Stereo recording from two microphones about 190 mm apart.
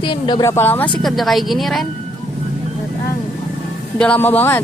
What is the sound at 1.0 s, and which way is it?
Speech, centre (ahead or behind).